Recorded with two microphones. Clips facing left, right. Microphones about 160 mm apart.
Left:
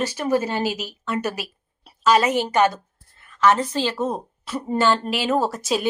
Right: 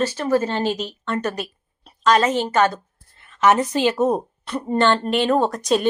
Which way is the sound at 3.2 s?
20° right (ahead or behind).